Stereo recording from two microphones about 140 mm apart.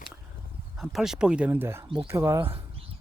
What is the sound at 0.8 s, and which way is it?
Speech, 5° right (ahead or behind).